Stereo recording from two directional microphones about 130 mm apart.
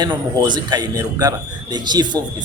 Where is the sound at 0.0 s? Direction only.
35° right (ahead or behind).